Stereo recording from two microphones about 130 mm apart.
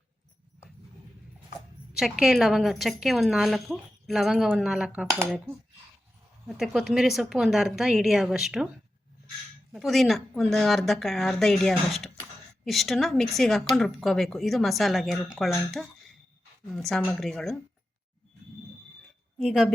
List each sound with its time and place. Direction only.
1.9 s a woman's voice: 5° right (ahead or behind)
6.5 s a woman's voice: 5° right (ahead or behind)
9.7 s a woman's voice: centre (ahead or behind)
19.4 s a woman's voice: centre (ahead or behind)